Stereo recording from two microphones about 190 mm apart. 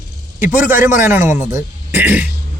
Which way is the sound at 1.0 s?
15° right (ahead or behind).